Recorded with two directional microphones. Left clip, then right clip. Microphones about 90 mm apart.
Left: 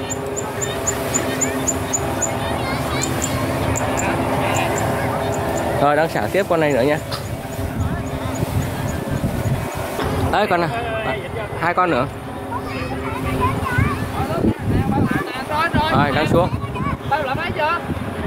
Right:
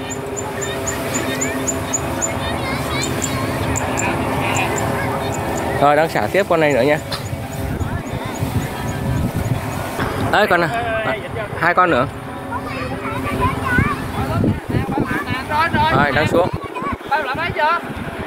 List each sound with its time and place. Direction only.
4.0 s vehicle: 40° left (ahead or behind)
5.8 s speech: centre (ahead or behind)
10.3 s speech: 15° right (ahead or behind)
11.6 s speech: 10° right (ahead or behind)
15.6 s a sound: 35° left (ahead or behind)
16.0 s speech: centre (ahead or behind)